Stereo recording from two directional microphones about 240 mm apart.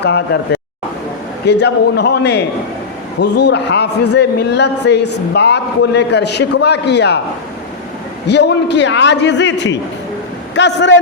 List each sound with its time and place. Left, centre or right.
0.0 s a man's voice: left
8.3 s a man's voice: left